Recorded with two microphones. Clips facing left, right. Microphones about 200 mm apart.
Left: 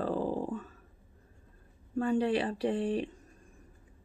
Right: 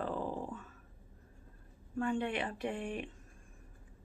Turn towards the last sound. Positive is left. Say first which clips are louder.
# left 8 dB
turn(degrees=35)  # may be behind; listen again after turning